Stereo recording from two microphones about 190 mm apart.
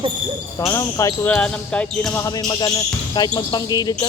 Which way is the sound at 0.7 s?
15° left (ahead or behind).